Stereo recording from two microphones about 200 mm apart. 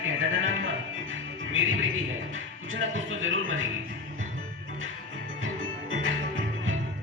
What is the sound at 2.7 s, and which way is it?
Speech, 75° right (ahead or behind).